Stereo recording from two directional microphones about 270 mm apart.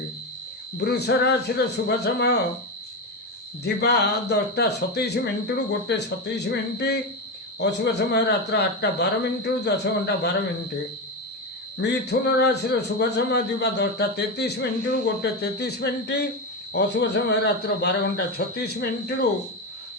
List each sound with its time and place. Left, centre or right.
0.8 s a man's voice: left
3.6 s a man's voice: left
11.8 s a man's voice: left